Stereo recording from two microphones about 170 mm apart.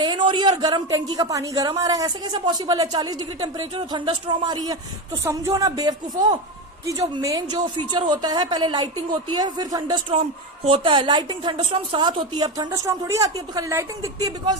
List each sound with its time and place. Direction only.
0.0 s speech: 25° right (ahead or behind)